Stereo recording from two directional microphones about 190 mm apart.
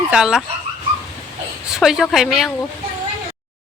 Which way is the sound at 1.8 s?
Centre (ahead or behind).